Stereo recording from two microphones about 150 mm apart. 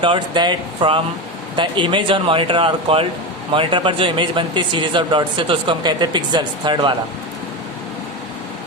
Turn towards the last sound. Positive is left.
turn(degrees=-30)  # may be behind; listen again after turning